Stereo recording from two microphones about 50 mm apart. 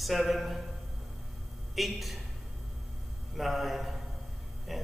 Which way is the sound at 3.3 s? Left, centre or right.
Centre.